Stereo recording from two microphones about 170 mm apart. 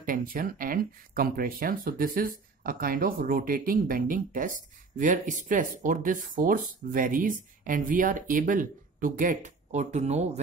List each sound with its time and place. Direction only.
0.0 s speech: 55° right (ahead or behind)